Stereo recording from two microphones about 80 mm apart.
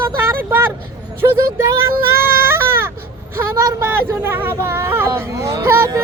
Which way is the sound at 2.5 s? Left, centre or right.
Right.